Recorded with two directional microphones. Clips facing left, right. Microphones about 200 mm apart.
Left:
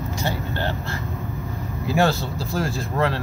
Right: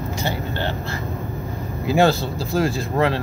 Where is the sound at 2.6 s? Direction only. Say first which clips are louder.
Right 3 dB; 20° right (ahead or behind).